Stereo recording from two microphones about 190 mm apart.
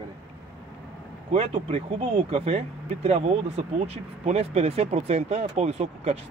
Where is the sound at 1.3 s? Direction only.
30° right (ahead or behind).